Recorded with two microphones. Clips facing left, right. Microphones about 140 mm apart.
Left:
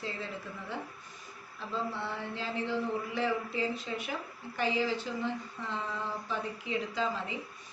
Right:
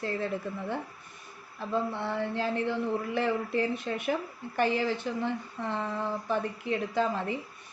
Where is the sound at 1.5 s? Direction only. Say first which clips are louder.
Right 5 dB; 60° right (ahead or behind).